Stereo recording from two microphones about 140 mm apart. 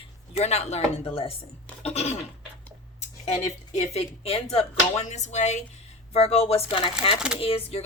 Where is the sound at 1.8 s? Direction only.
50° left (ahead or behind).